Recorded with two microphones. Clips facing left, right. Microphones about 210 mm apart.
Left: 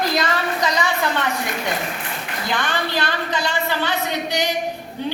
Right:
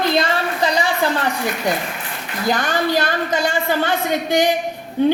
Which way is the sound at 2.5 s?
45° right (ahead or behind).